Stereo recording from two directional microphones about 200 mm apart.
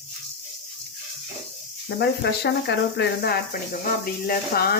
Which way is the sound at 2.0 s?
55° left (ahead or behind).